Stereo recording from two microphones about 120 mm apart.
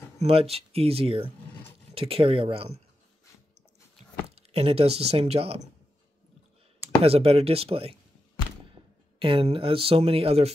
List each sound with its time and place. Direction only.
0.2 s speech: 55° right (ahead or behind)
4.4 s speech: 55° right (ahead or behind)
7.0 s speech: 55° right (ahead or behind)
9.2 s speech: 50° right (ahead or behind)